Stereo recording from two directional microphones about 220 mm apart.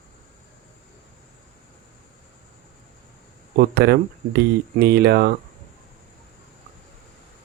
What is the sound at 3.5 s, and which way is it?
Speech, 45° right (ahead or behind).